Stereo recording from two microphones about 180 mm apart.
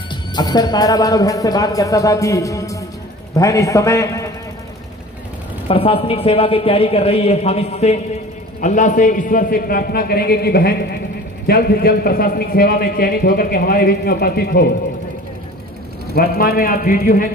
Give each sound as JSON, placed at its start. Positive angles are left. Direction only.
{"t": 0.1, "sound": "a man's voice", "side_deg": 25}
{"t": 5.7, "sound": "a man's voice", "side_deg": 30}
{"t": 16.2, "sound": "speech", "side_deg": 55}